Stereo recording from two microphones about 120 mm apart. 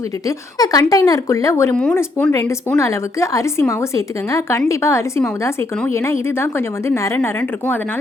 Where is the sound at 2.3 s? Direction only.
25° left (ahead or behind).